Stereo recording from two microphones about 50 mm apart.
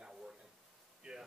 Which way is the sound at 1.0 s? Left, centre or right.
Right.